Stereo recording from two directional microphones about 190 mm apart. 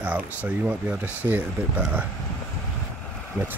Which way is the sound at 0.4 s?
10° right (ahead or behind).